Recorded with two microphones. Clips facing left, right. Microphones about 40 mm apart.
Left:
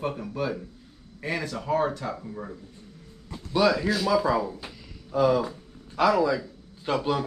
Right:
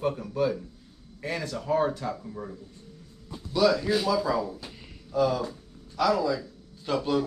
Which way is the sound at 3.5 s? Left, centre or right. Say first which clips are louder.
Even; left.